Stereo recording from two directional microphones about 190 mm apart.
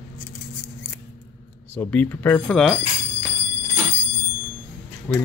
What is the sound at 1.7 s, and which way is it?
Speech, 10° left (ahead or behind).